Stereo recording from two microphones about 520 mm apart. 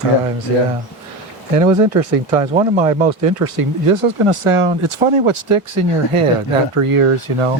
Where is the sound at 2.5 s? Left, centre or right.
Centre.